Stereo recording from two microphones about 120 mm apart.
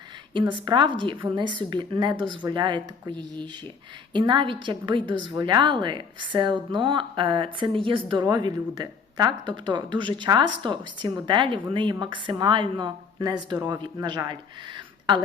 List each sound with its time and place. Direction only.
0.5 s a woman's voice: 40° right (ahead or behind)